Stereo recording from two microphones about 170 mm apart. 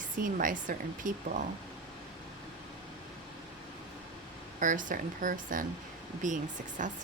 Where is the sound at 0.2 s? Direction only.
55° right (ahead or behind).